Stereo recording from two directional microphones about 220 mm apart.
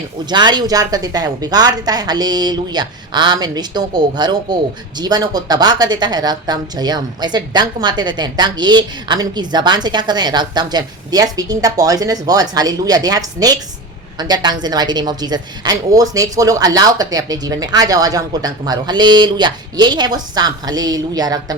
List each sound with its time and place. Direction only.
0.3 s a woman's voice: 20° right (ahead or behind)